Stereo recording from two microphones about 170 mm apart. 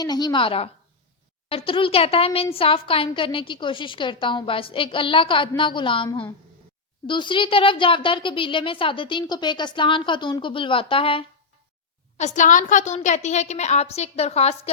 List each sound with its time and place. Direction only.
0.0 s a woman's voice: 25° left (ahead or behind)
7.1 s a woman's voice: 30° left (ahead or behind)
12.1 s a woman's voice: 45° left (ahead or behind)